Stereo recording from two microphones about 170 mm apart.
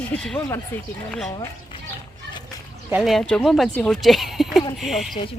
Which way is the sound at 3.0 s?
Centre (ahead or behind).